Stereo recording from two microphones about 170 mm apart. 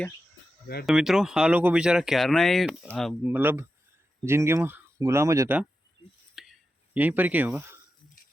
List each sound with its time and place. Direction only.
0.9 s speech: centre (ahead or behind)
3.2 s speech: 10° right (ahead or behind)
6.3 s a sound: centre (ahead or behind)